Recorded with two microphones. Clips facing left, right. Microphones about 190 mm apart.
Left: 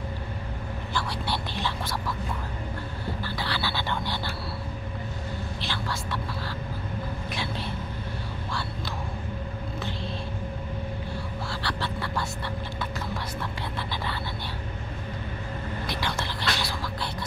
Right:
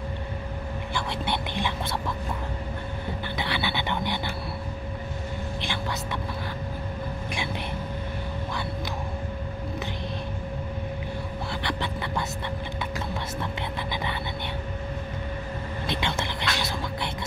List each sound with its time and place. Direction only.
0.9 s whispering: 20° right (ahead or behind)
3.3 s a sound: 20° right (ahead or behind)
11.6 s music: 20° right (ahead or behind)
15.9 s music: 25° right (ahead or behind)